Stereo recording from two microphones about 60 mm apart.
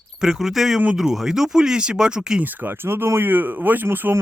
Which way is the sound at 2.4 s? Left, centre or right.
Right.